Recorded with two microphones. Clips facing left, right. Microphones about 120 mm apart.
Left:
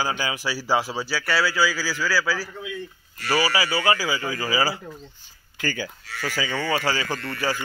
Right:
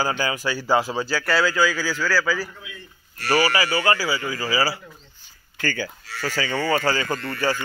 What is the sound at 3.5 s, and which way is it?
Speech, 15° left (ahead or behind).